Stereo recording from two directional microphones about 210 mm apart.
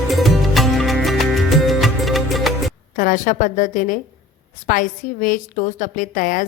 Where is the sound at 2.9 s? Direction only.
40° left (ahead or behind).